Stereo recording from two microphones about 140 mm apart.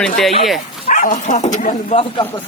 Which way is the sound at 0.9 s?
70° left (ahead or behind).